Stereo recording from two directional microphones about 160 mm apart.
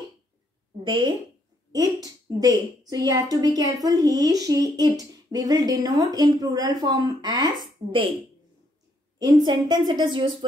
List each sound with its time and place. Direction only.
0.8 s a woman's voice: 30° right (ahead or behind)
9.2 s a woman's voice: 25° right (ahead or behind)